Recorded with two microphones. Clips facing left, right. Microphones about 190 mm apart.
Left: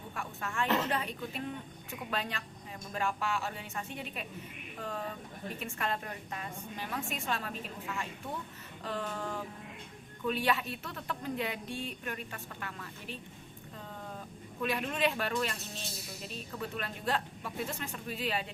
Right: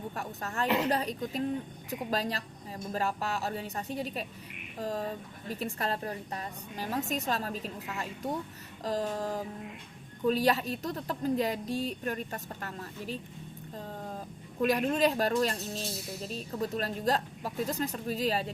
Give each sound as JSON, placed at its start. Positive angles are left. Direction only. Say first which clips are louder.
{"t": 0.1, "sound": "a woman's voice", "louder": "right 2 dB", "side_deg": -40}
{"t": 14.6, "sound": "a woman's voice", "louder": "right 6 dB", "side_deg": -40}